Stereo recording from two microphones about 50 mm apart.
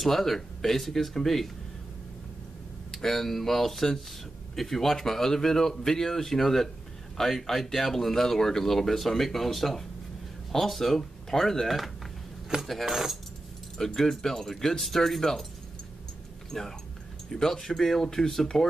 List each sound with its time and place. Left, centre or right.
0.0 s speech: centre
2.9 s speech: centre
12.5 s speech: centre
12.8 s speech: centre
13.7 s speech: centre
16.5 s speech: centre